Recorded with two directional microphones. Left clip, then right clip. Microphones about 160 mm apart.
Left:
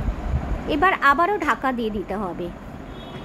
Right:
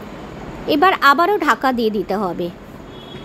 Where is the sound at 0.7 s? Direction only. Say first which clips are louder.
Right 5 dB; 30° right (ahead or behind).